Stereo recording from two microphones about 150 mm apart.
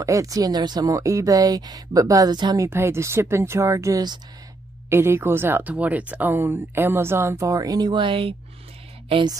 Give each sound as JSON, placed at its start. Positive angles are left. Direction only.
{"t": 0.0, "sound": "speech", "side_deg": -20}